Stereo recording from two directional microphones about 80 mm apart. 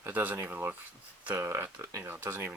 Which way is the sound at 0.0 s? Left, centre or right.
Right.